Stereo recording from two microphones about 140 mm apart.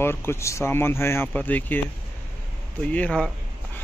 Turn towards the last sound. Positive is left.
turn(degrees=10)  # may be behind; listen again after turning